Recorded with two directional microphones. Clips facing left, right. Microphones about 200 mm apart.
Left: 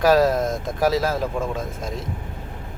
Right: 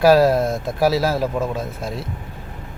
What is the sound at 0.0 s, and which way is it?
A man's voice, 10° right (ahead or behind).